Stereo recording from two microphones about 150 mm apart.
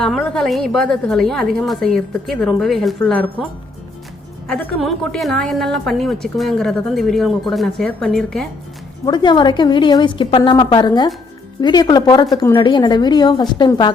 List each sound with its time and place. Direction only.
0.3 s a woman's voice: centre (ahead or behind)
4.4 s a woman's voice: 5° left (ahead or behind)
9.0 s a woman's voice: 30° left (ahead or behind)